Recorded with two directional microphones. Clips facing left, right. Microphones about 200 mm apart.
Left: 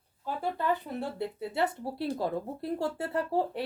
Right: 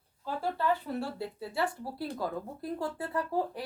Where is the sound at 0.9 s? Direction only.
20° left (ahead or behind).